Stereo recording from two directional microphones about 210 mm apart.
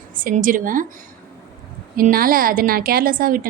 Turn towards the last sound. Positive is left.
turn(degrees=-40)  # may be behind; listen again after turning